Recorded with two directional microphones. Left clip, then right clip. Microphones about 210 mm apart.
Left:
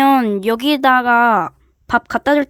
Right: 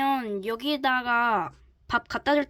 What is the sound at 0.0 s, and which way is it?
A woman's voice, 45° left (ahead or behind).